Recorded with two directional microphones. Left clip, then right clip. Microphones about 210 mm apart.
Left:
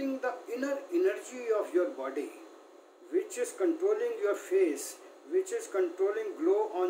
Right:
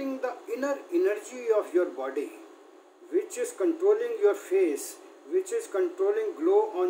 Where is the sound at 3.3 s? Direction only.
Centre (ahead or behind).